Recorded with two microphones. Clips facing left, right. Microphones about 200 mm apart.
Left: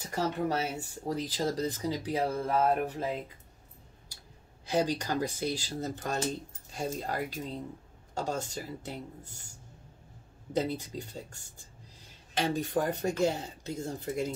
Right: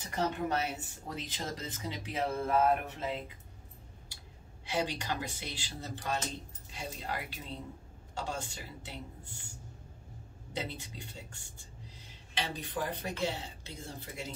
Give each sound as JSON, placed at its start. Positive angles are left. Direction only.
{"t": 0.1, "sound": "speech", "side_deg": 35}
{"t": 4.6, "sound": "speech", "side_deg": 40}
{"t": 10.5, "sound": "speech", "side_deg": 45}